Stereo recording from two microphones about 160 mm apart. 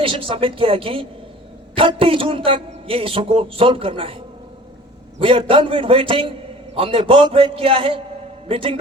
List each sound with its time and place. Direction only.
0.0 s a man's voice: 35° right (ahead or behind)
5.2 s a man's voice: 35° right (ahead or behind)